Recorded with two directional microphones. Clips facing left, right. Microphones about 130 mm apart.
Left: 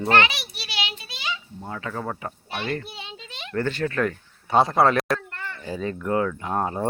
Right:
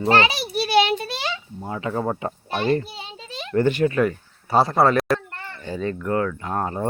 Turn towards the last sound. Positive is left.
turn(degrees=10)  # may be behind; listen again after turning